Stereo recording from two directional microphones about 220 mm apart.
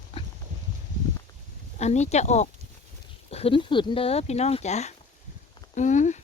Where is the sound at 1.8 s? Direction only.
30° left (ahead or behind).